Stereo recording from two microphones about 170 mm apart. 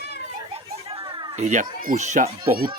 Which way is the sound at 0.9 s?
25° right (ahead or behind).